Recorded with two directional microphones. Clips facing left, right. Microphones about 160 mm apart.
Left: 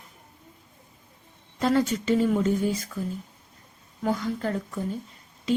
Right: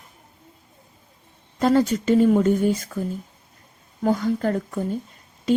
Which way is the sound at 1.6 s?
40° right (ahead or behind).